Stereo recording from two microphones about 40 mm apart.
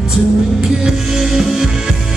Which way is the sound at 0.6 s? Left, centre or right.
Centre.